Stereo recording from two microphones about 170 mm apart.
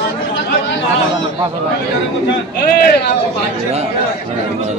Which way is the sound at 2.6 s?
65° left (ahead or behind).